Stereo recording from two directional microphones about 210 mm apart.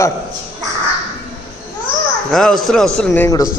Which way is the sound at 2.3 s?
Centre (ahead or behind).